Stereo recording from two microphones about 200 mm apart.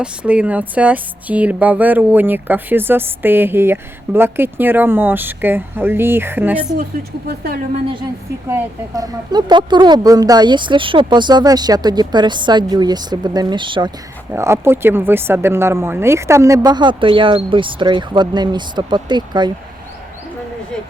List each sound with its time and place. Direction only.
0.0 s speech: 5° right (ahead or behind)
7.3 s a woman's voice: 45° right (ahead or behind)
8.4 s speech: 15° right (ahead or behind)
14.3 s speech: 10° right (ahead or behind)